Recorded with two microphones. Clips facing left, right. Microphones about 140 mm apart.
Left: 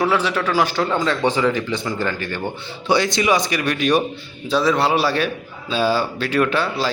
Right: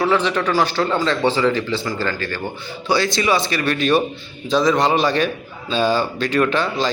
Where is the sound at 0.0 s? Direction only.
5° left (ahead or behind).